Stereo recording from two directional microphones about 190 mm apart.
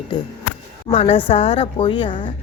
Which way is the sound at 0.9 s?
30° left (ahead or behind).